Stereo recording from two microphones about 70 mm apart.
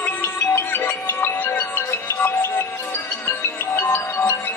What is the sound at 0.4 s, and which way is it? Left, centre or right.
Music, left.